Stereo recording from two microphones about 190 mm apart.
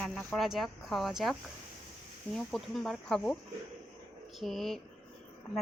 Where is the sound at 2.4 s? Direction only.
Centre (ahead or behind).